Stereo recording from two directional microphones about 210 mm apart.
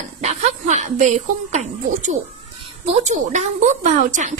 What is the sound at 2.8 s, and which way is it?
A woman's voice, 30° right (ahead or behind).